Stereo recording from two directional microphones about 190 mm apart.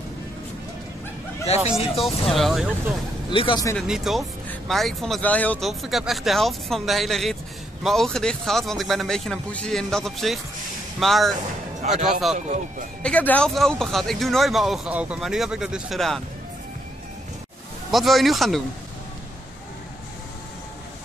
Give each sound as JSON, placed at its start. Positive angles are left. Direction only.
{"t": 1.7, "sound": "speech", "side_deg": 30}
{"t": 2.2, "sound": "speech", "side_deg": 0}
{"t": 3.3, "sound": "speech", "side_deg": 25}
{"t": 3.7, "sound": "speech", "side_deg": -5}
{"t": 11.8, "sound": "speech", "side_deg": -35}
{"t": 13.0, "sound": "speech", "side_deg": 5}
{"t": 17.9, "sound": "speech", "side_deg": 0}